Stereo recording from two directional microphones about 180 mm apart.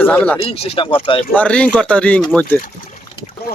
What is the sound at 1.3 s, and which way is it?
Speech, 5° left (ahead or behind).